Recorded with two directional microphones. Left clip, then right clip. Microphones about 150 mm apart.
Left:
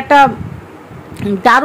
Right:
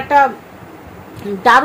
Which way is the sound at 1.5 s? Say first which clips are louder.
Right 1 dB; 45° left (ahead or behind).